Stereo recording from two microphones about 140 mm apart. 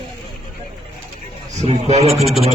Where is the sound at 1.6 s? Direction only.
45° right (ahead or behind).